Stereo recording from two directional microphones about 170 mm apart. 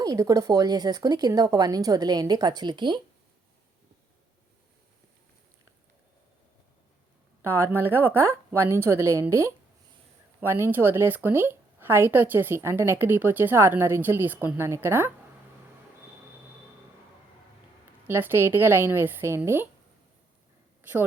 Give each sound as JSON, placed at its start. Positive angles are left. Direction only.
{"t": 0.0, "sound": "speech", "side_deg": -20}
{"t": 7.4, "sound": "a woman's voice", "side_deg": -15}
{"t": 18.1, "sound": "a woman's voice", "side_deg": -10}